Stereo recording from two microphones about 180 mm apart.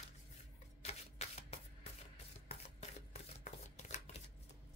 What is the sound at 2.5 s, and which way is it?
Shuffling cards, 40° left (ahead or behind).